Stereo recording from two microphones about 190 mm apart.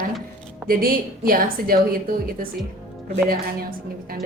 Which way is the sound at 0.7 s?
50° right (ahead or behind).